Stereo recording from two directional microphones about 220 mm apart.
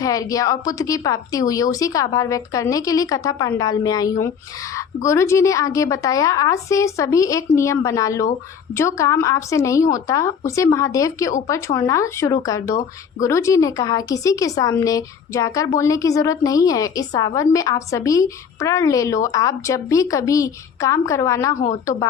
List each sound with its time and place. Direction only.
0.0 s speech: 15° left (ahead or behind)